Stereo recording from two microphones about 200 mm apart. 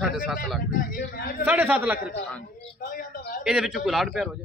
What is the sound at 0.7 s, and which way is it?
Speech, 45° left (ahead or behind).